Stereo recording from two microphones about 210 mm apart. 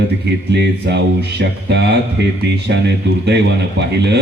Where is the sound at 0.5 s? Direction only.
55° right (ahead or behind).